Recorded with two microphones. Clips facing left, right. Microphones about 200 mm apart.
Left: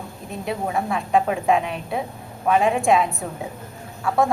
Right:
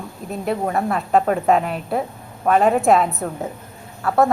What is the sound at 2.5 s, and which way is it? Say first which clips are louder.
Speech: right 3 dB; 40° right (ahead or behind).